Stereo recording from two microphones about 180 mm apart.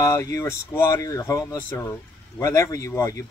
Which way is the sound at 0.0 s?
20° left (ahead or behind).